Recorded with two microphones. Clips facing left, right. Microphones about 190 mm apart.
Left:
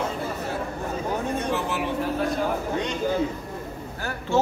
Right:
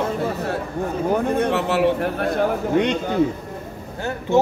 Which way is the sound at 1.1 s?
60° right (ahead or behind).